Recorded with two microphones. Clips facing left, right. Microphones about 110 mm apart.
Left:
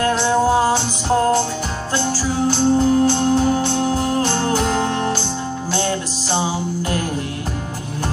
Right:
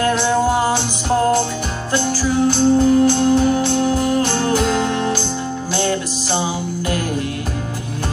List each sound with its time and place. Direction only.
2.4 s music: 35° left (ahead or behind)